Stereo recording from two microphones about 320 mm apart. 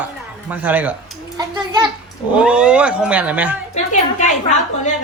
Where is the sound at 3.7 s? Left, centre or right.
Left.